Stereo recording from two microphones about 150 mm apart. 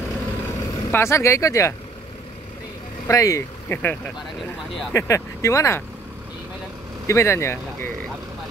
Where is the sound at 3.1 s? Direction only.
20° left (ahead or behind).